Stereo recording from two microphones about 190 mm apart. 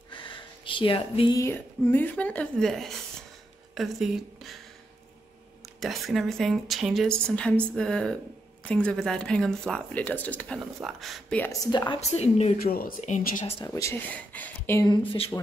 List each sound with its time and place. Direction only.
0.1 s a sound: 25° left (ahead or behind)
1.3 s speech: 15° left (ahead or behind)
5.8 s speech: centre (ahead or behind)
11.6 s speech: 20° left (ahead or behind)
12.2 s a woman's voice: 35° left (ahead or behind)
12.6 s speech: 50° left (ahead or behind)
13.7 s speech: 10° left (ahead or behind)
14.9 s speech: 30° left (ahead or behind)